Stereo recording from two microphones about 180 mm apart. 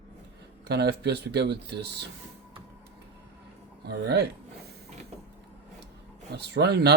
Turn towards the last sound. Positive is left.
turn(degrees=-65)  # may be behind; listen again after turning